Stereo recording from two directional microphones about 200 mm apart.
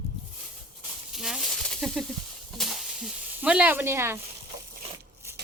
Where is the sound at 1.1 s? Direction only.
Centre (ahead or behind).